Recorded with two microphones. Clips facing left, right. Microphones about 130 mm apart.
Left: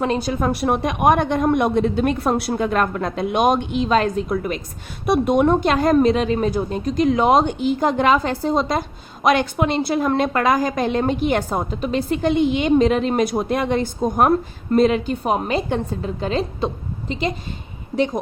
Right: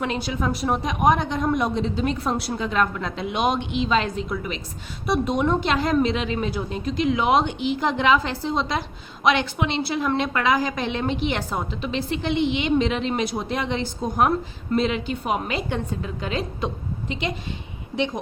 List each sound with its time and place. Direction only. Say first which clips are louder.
0.0 s a woman's voice: left 5 dB; 40° left (ahead or behind)